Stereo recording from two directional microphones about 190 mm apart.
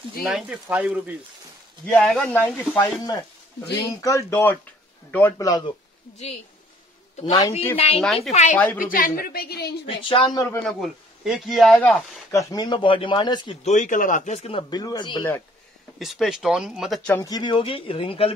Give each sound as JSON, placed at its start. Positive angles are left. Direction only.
{"t": 0.2, "sound": "speech", "side_deg": 0}
{"t": 1.9, "sound": "a man's voice", "side_deg": 5}
{"t": 3.6, "sound": "speech", "side_deg": 15}
{"t": 7.2, "sound": "speech", "side_deg": 20}
{"t": 7.7, "sound": "speech", "side_deg": 30}
{"t": 8.0, "sound": "a man's voice", "side_deg": 5}
{"t": 8.3, "sound": "a man's voice", "side_deg": 35}
{"t": 9.8, "sound": "speech", "side_deg": 25}
{"t": 10.4, "sound": "a man's voice", "side_deg": 5}
{"t": 12.3, "sound": "speech", "side_deg": 15}
{"t": 13.7, "sound": "a man's voice", "side_deg": 40}
{"t": 14.6, "sound": "speech", "side_deg": 20}
{"t": 16.0, "sound": "a man's voice", "side_deg": 0}
{"t": 17.2, "sound": "speech", "side_deg": 20}